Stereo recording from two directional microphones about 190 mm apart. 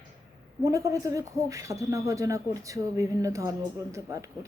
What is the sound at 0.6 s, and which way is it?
A man's voice, 15° right (ahead or behind).